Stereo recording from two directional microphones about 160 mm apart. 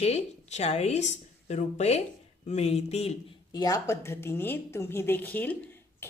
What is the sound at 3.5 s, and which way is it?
A woman's voice, 25° left (ahead or behind).